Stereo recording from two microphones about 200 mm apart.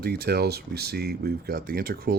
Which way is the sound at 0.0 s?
50° right (ahead or behind).